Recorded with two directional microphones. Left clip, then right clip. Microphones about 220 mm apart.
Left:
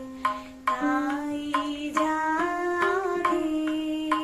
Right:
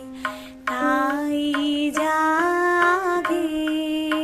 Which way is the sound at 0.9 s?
45° right (ahead or behind).